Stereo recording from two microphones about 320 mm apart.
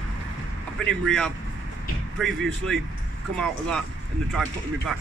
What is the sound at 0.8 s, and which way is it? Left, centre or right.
Speech, centre.